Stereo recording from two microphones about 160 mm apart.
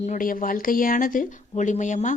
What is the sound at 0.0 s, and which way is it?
A woman's voice, 55° left (ahead or behind).